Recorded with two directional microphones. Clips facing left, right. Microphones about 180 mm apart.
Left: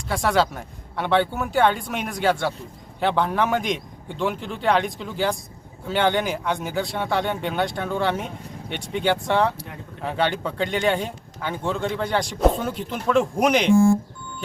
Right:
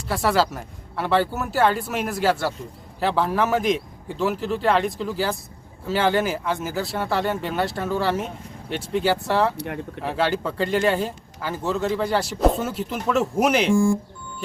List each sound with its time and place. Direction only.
0.1 s speech: 5° right (ahead or behind)
9.6 s speech: 65° right (ahead or behind)
10.0 s speech: 5° right (ahead or behind)